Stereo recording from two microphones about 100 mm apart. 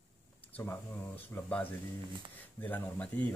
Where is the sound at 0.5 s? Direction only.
20° left (ahead or behind).